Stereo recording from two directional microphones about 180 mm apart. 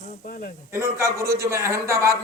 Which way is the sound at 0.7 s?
15° right (ahead or behind).